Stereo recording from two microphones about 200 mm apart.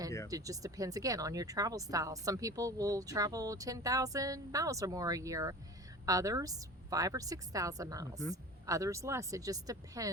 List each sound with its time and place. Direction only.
0.3 s speech: 15° right (ahead or behind)